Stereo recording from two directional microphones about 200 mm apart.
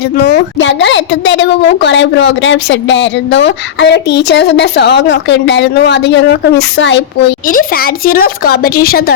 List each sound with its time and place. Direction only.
0.2 s a woman's voice: 55° left (ahead or behind)
7.4 s speech: 45° left (ahead or behind)